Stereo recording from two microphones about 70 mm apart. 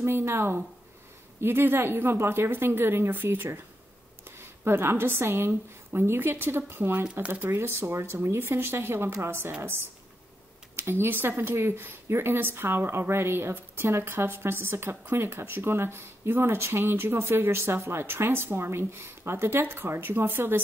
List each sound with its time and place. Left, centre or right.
0.0 s speech: right
7.2 s speech: right
7.5 s speech: right
10.8 s speech: right